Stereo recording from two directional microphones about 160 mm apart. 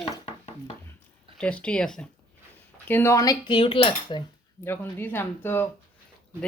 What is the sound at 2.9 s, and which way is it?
Cutlery, 15° left (ahead or behind).